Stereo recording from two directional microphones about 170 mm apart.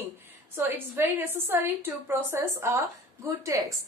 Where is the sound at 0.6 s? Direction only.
15° right (ahead or behind).